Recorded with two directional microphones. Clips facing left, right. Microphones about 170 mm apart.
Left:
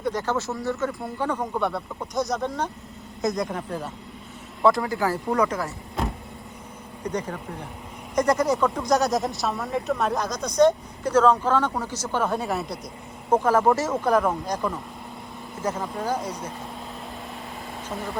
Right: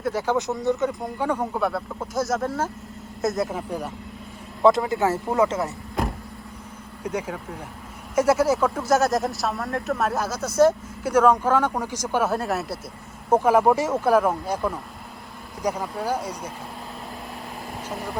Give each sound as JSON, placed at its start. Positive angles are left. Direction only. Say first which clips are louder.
{"t": 0.0, "sound": "speech", "louder": "right 2 dB", "side_deg": -10}
{"t": 4.6, "sound": "speech", "louder": "right 3 dB", "side_deg": -20}
{"t": 7.0, "sound": "speech", "louder": "right 1 dB", "side_deg": -10}